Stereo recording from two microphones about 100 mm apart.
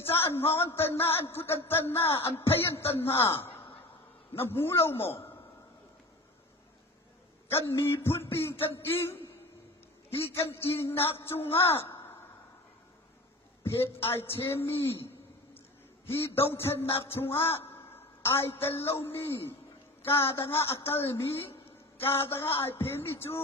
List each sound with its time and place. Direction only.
0.0 s a man's voice: 25° left (ahead or behind)
7.5 s a man's voice: 25° left (ahead or behind)
10.3 s a man's voice: 25° left (ahead or behind)
13.7 s a man's voice: 25° left (ahead or behind)
16.3 s a man's voice: 25° left (ahead or behind)